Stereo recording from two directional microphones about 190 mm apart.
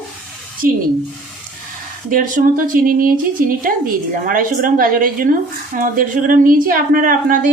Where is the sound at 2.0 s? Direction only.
45° right (ahead or behind).